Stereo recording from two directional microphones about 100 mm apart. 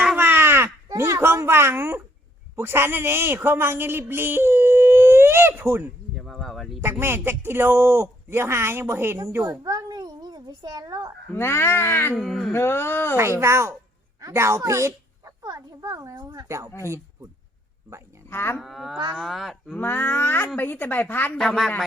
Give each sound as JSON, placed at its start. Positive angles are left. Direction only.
{"t": 0.2, "sound": "a sound", "side_deg": -20}
{"t": 0.9, "sound": "a child's voice", "side_deg": -25}
{"t": 6.1, "sound": "a sound", "side_deg": 0}
{"t": 7.0, "sound": "speech", "side_deg": -25}
{"t": 9.6, "sound": "babbling", "side_deg": -40}
{"t": 11.3, "sound": "speech", "side_deg": 25}
{"t": 12.1, "sound": "speech", "side_deg": 0}
{"t": 12.5, "sound": "speech", "side_deg": 25}
{"t": 13.4, "sound": "a child's voice", "side_deg": -25}
{"t": 18.3, "sound": "speech", "side_deg": 25}
{"t": 18.6, "sound": "speech", "side_deg": -5}
{"t": 19.7, "sound": "speech", "side_deg": 20}
{"t": 21.3, "sound": "speech", "side_deg": 5}